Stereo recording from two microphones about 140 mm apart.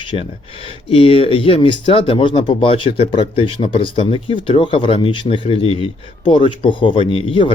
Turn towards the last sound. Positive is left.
turn(degrees=40)  # may be behind; listen again after turning